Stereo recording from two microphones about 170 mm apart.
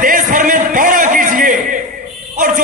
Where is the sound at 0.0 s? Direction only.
55° right (ahead or behind).